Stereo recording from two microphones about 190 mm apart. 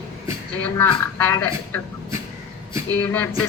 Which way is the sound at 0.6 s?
10° left (ahead or behind).